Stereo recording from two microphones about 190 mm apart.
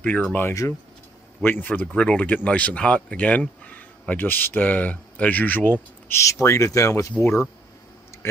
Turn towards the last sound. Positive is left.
turn(degrees=15)  # may be behind; listen again after turning